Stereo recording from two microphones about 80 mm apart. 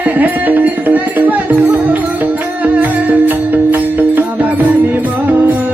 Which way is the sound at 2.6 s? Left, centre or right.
Centre.